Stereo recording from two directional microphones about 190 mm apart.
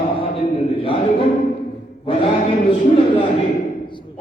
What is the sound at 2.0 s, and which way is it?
A man's voice, 30° left (ahead or behind).